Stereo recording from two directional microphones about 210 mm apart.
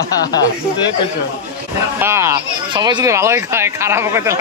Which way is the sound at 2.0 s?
10° right (ahead or behind).